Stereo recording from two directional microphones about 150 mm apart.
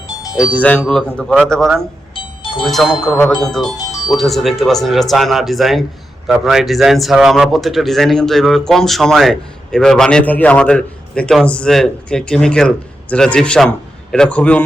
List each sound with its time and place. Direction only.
0.6 s a man's voice: 10° left (ahead or behind)
2.1 s music: 35° left (ahead or behind)
2.6 s a man's voice: centre (ahead or behind)